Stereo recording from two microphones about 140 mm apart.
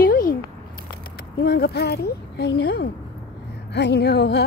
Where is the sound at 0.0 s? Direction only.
90° left.